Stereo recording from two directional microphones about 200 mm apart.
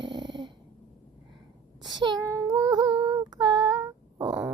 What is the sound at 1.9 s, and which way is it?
Speech, 20° right (ahead or behind).